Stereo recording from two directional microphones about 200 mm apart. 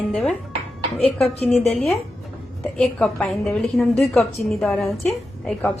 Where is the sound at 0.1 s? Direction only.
Centre (ahead or behind).